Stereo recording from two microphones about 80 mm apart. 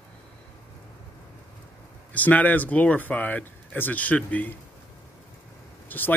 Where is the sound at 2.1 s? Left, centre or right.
Centre.